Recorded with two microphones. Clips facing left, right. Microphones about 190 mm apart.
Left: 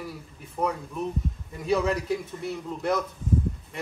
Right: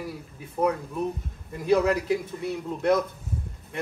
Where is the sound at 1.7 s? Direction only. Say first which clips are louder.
Right 3 dB; 5° right (ahead or behind).